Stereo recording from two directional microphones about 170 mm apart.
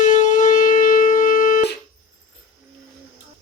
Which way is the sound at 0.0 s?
50° left (ahead or behind).